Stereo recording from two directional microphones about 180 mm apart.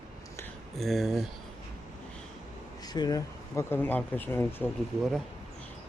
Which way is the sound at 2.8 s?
20° left (ahead or behind).